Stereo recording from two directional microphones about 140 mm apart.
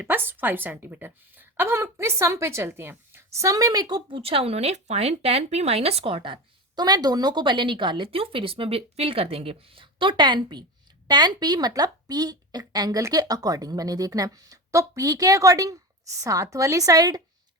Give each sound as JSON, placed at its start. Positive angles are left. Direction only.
{"t": 0.0, "sound": "speech", "side_deg": -15}
{"t": 4.2, "sound": "speech", "side_deg": -45}